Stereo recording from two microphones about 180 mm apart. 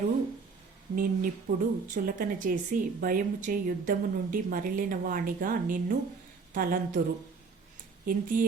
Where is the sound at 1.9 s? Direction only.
50° right (ahead or behind).